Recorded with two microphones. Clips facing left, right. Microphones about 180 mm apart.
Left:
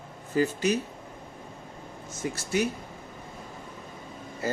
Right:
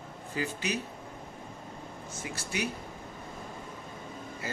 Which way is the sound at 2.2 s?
45° left (ahead or behind).